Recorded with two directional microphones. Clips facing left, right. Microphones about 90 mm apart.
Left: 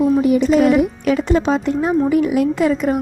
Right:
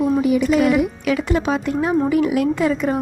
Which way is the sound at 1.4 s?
20° left (ahead or behind).